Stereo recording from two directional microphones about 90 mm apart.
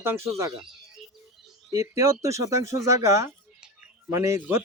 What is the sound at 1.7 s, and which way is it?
Speech, 35° right (ahead or behind).